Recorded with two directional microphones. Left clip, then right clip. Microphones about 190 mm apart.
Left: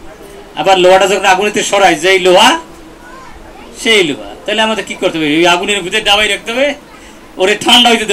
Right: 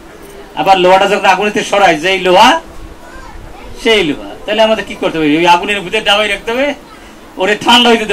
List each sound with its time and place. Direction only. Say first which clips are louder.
0.6 s a man's voice: even; 55° left (ahead or behind)
3.8 s a man's voice: left 1 dB; 55° left (ahead or behind)